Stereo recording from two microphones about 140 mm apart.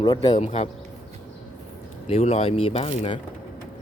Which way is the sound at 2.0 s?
45° left (ahead or behind).